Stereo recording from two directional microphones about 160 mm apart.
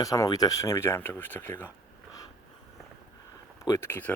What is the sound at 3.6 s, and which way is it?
Speech, 20° left (ahead or behind).